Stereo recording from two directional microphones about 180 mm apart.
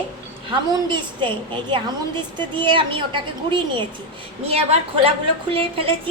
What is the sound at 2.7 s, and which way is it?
A woman's voice, 25° right (ahead or behind).